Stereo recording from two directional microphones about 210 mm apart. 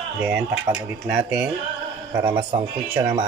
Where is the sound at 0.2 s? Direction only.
5° right (ahead or behind).